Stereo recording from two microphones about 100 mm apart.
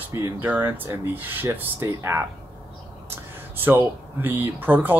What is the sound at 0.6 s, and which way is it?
Speech, 25° right (ahead or behind).